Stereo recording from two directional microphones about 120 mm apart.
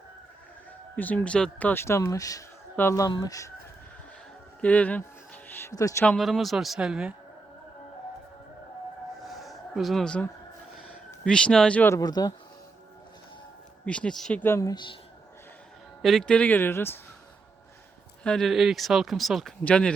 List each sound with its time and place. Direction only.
0.9 s speech: 10° left (ahead or behind)
3.1 s speech: 35° left (ahead or behind)
4.6 s music: 10° left (ahead or behind)
5.7 s speech: 25° left (ahead or behind)
6.1 s speech: centre (ahead or behind)
9.2 s a sound: centre (ahead or behind)
11.9 s speech: 30° left (ahead or behind)
13.8 s speech: 10° left (ahead or behind)
14.4 s speech: 25° left (ahead or behind)
16.0 s speech: centre (ahead or behind); by 17.0 s 20° left (ahead or behind)
18.2 s speech: 5° left (ahead or behind)